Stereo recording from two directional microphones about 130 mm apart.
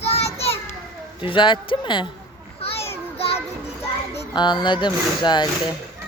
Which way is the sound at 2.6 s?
50° left (ahead or behind).